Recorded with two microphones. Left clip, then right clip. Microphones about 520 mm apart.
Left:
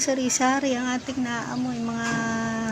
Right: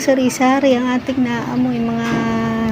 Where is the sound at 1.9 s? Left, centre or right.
Left.